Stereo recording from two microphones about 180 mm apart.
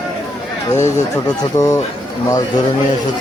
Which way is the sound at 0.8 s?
40° left (ahead or behind).